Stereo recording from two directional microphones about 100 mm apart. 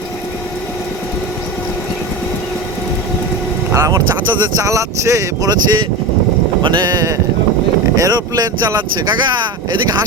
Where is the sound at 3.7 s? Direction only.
30° right (ahead or behind).